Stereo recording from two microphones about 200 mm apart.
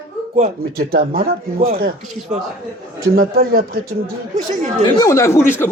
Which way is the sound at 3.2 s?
50° right (ahead or behind).